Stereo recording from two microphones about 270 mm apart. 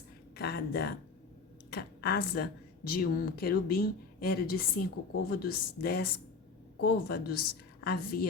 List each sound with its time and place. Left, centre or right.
0.3 s a woman's voice: left